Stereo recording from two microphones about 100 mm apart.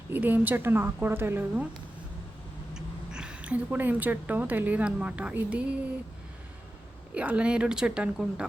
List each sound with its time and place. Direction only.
0.1 s a woman's voice: 20° right (ahead or behind)
2.7 s speech: 10° right (ahead or behind)
7.1 s speech: 15° right (ahead or behind)